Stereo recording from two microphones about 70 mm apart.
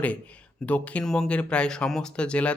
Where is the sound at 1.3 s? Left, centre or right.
Centre.